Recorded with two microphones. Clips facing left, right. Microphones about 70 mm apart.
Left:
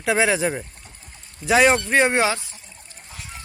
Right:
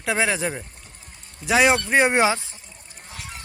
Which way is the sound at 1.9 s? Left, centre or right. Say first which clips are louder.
Even; centre.